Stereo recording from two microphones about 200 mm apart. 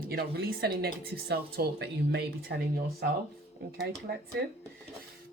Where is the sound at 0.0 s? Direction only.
50° right (ahead or behind).